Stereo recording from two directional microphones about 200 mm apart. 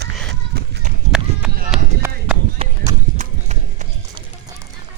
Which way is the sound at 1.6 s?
5° right (ahead or behind).